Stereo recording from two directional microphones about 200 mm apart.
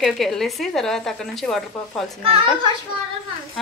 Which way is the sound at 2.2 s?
25° right (ahead or behind).